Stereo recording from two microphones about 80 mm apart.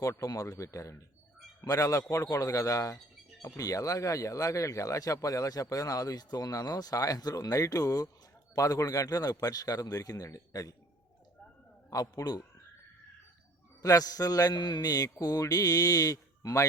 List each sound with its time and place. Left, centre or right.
0.0 s speech: left
11.9 s speech: left
13.8 s speech: left